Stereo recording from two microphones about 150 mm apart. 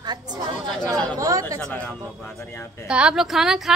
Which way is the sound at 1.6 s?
10° left (ahead or behind).